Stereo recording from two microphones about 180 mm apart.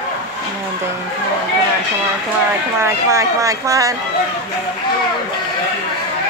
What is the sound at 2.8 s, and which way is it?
Speech, 15° right (ahead or behind).